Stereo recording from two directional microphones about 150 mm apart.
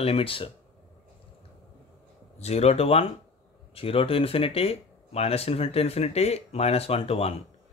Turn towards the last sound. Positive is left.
turn(degrees=40)  # may be behind; listen again after turning